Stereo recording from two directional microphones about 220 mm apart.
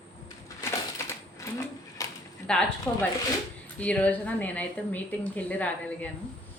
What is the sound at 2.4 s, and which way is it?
Speech, 5° left (ahead or behind).